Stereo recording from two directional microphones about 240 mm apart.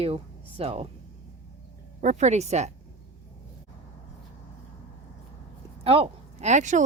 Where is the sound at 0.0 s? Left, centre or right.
Right.